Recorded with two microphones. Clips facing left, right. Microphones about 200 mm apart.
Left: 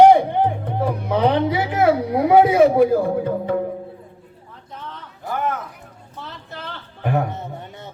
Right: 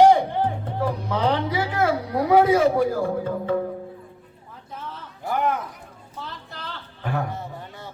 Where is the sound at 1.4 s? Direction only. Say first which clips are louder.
Left 5 dB; 20° left (ahead or behind).